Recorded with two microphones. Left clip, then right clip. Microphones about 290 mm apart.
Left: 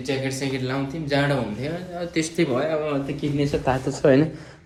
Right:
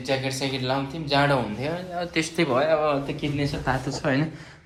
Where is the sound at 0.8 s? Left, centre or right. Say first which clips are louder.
Even; centre.